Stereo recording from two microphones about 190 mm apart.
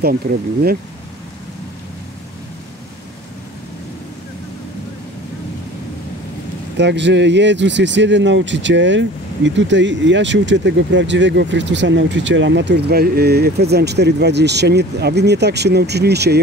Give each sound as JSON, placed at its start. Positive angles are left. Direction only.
{"t": 0.0, "sound": "speech", "side_deg": -55}
{"t": 6.8, "sound": "speech", "side_deg": -65}